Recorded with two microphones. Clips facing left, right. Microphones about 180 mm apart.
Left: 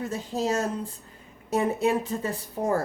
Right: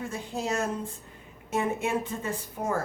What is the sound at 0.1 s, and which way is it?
A woman's voice, 40° left (ahead or behind).